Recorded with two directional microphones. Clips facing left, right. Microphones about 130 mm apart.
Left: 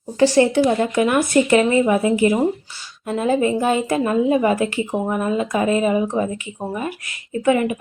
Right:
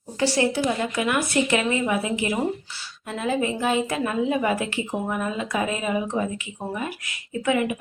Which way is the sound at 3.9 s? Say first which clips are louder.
Left 6 dB; 30° left (ahead or behind).